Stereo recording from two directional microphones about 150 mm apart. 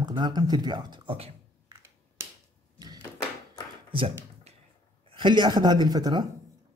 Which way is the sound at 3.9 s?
35° right (ahead or behind).